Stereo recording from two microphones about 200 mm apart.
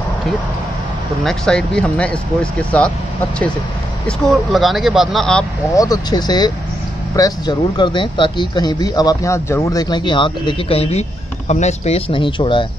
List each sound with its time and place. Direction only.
1.2 s speech: 5° left (ahead or behind)
4.2 s speech: centre (ahead or behind)
5.8 s speech: 20° left (ahead or behind)